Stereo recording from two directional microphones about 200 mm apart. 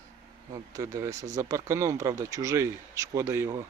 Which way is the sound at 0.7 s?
15° right (ahead or behind).